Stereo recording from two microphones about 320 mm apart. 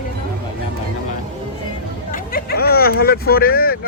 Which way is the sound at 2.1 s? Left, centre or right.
Left.